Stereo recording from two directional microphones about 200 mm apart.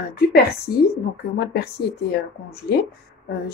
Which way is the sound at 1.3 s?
50° left (ahead or behind).